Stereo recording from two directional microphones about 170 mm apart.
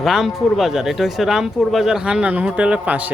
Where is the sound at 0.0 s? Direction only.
Centre (ahead or behind).